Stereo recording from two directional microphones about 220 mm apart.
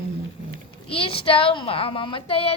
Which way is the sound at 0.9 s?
25° left (ahead or behind).